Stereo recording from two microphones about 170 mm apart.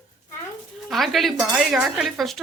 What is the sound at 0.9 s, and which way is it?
A woman's voice, centre (ahead or behind).